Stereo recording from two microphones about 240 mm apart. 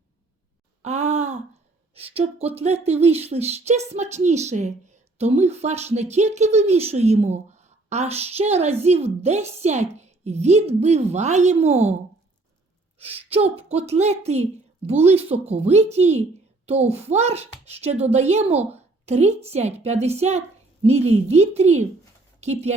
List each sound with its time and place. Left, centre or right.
0.8 s groan: right
2.0 s speech: right
13.0 s speech: right